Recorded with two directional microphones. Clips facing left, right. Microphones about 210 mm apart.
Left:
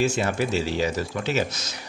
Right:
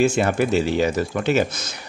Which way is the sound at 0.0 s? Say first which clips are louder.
Right 5 dB; 55° right (ahead or behind).